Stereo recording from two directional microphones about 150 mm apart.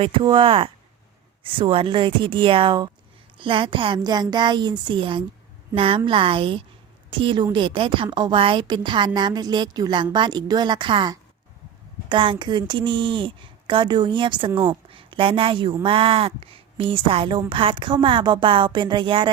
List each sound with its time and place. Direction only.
0.0 s a woman's voice: 35° right (ahead or behind)